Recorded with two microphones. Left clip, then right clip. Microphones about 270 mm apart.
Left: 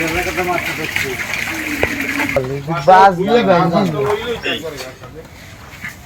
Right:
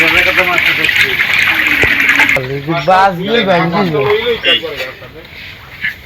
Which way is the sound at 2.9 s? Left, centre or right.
Right.